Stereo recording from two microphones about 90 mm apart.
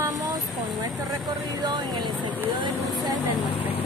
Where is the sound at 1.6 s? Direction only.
55° right (ahead or behind).